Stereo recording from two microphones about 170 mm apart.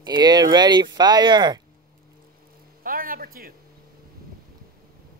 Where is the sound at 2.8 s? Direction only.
55° right (ahead or behind).